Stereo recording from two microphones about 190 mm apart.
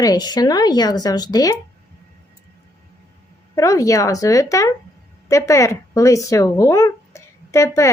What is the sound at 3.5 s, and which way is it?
Speech, 15° left (ahead or behind).